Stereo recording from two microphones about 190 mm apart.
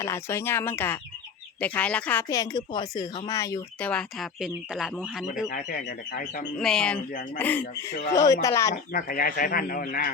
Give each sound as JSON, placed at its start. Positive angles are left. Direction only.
{"t": 0.0, "sound": "speech", "side_deg": 15}
{"t": 2.3, "sound": "speech", "side_deg": 20}
{"t": 5.5, "sound": "speech", "side_deg": 50}
{"t": 6.6, "sound": "speech", "side_deg": 5}
{"t": 8.7, "sound": "speech", "side_deg": 45}